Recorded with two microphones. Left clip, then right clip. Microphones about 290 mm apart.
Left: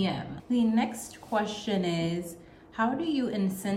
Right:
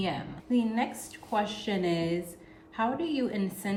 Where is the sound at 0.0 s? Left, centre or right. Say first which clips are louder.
Left 1 dB; centre.